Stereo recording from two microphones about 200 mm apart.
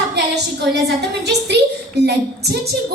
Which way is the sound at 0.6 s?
60° right (ahead or behind).